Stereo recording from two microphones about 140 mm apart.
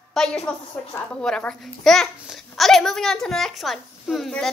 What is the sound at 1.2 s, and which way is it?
A child's voice, 5° left (ahead or behind).